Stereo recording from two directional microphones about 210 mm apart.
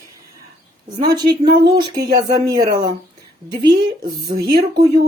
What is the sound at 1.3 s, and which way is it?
Speech, 50° right (ahead or behind).